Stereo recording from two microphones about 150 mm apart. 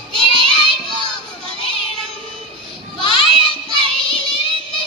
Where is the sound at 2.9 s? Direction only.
35° left (ahead or behind).